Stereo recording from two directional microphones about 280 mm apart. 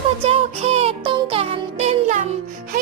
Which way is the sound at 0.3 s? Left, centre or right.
Right.